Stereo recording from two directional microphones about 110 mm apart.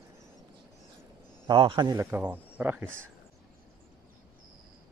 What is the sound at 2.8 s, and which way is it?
Speech, 10° left (ahead or behind).